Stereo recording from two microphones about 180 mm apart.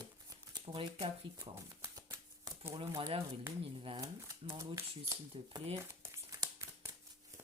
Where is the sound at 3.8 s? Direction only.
30° right (ahead or behind).